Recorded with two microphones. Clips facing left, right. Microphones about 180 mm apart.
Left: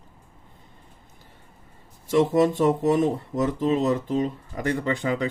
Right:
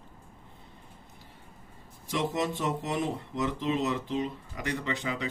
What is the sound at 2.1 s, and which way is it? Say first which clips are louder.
Speech: left 11 dB; 45° left (ahead or behind).